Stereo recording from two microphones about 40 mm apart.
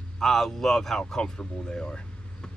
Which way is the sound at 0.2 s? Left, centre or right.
Centre.